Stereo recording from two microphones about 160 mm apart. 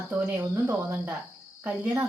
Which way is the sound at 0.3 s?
15° right (ahead or behind).